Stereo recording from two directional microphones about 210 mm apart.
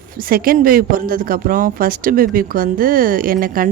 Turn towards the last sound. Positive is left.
turn(degrees=-45)  # may be behind; listen again after turning